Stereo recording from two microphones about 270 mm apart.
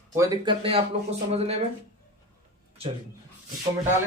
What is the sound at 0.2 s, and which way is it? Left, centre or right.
A man's voice, centre.